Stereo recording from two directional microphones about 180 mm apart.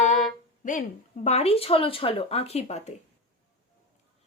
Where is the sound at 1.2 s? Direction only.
35° left (ahead or behind).